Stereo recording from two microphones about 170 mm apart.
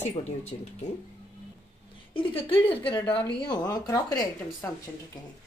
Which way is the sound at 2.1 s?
30° left (ahead or behind).